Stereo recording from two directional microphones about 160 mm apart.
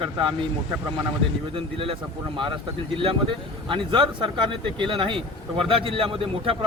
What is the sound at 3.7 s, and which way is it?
Speech, 30° right (ahead or behind).